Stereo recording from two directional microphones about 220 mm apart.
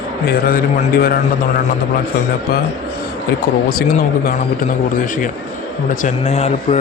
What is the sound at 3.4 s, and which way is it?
Speech, 45° left (ahead or behind).